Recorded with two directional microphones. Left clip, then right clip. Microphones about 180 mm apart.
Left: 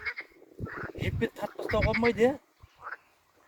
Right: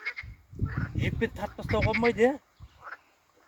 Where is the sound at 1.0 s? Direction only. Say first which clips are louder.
Right 2 dB; 20° right (ahead or behind).